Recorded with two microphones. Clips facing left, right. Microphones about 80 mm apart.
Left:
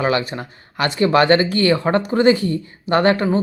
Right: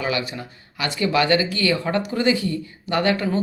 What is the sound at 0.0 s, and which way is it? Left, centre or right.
Speech, left.